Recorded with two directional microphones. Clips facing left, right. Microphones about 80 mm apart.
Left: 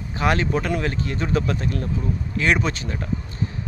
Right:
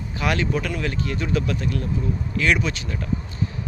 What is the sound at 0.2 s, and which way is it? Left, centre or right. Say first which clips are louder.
Speech: left 2 dB; left.